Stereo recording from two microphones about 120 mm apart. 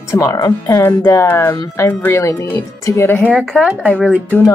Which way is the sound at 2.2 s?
25° left (ahead or behind).